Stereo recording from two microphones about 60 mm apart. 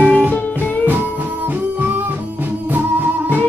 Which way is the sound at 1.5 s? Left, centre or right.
Right.